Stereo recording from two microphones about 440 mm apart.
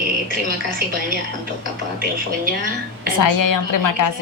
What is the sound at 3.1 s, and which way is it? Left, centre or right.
Speech, left.